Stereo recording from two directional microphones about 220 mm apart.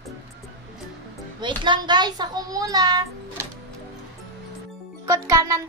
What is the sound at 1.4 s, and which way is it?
A woman's voice, 20° right (ahead or behind).